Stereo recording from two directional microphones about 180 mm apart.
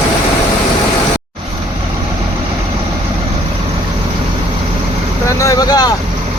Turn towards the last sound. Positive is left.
turn(degrees=20)  # may be behind; listen again after turning